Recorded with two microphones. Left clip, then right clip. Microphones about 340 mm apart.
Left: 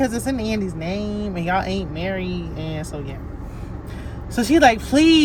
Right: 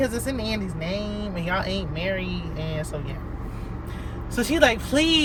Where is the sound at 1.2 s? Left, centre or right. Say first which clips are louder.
Left 4 dB; left.